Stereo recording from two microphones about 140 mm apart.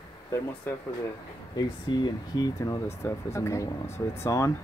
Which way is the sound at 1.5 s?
30° left (ahead or behind).